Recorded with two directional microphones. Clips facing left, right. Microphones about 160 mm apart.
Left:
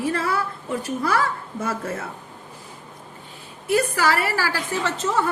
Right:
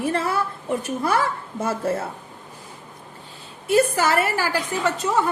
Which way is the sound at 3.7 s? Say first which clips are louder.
Right 2 dB; 25° right (ahead or behind).